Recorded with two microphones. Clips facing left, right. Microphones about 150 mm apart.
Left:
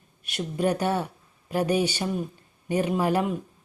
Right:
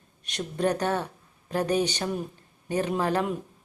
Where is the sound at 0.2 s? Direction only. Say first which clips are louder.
Left 1 dB; 5° left (ahead or behind).